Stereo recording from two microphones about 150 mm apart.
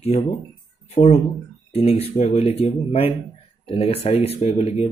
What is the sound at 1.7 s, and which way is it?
Speech, 45° left (ahead or behind).